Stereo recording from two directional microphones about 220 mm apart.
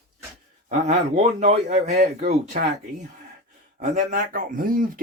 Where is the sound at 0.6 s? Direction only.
30° right (ahead or behind).